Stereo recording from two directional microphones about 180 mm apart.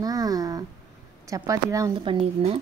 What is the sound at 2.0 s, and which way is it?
Speech, 30° right (ahead or behind).